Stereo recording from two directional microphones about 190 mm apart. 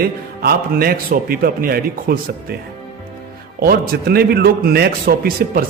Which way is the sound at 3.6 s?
55° right (ahead or behind).